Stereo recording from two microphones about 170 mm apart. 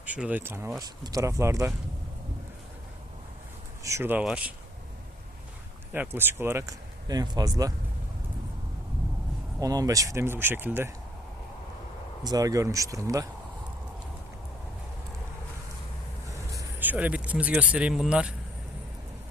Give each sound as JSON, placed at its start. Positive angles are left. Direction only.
{"t": 0.0, "sound": "speech", "side_deg": -10}
{"t": 3.8, "sound": "speech", "side_deg": -15}
{"t": 5.9, "sound": "speech", "side_deg": -10}
{"t": 9.6, "sound": "speech", "side_deg": -20}
{"t": 12.2, "sound": "speech", "side_deg": -20}
{"t": 16.6, "sound": "speech", "side_deg": -10}